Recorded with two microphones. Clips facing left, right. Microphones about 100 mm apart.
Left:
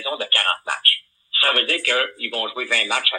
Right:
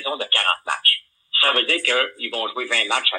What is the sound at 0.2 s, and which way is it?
Speech, 30° right (ahead or behind).